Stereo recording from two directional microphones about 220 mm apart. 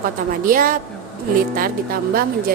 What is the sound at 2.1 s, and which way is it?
Speech, 40° right (ahead or behind).